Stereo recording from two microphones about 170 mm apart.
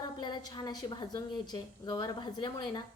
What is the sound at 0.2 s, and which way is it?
A woman's voice, 25° left (ahead or behind).